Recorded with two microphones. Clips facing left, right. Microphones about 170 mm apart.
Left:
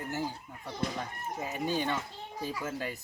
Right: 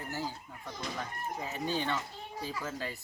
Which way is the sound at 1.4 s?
15° left (ahead or behind).